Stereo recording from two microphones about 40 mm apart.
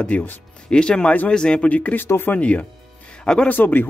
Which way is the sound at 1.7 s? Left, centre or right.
Left.